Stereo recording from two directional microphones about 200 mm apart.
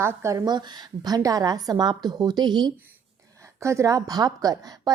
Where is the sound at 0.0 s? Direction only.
15° right (ahead or behind).